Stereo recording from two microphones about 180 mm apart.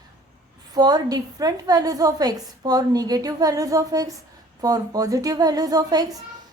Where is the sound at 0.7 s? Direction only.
20° right (ahead or behind).